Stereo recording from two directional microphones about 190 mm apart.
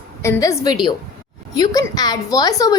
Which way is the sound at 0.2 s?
15° left (ahead or behind).